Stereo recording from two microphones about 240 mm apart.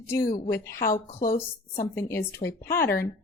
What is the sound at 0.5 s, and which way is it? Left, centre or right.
Speech, centre.